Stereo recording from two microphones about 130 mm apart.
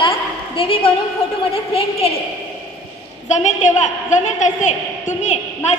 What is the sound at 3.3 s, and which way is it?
A woman's voice, 65° left (ahead or behind).